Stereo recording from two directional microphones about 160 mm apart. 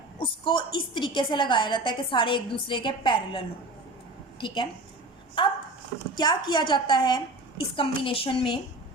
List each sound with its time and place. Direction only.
0.2 s a woman's voice: 30° left (ahead or behind)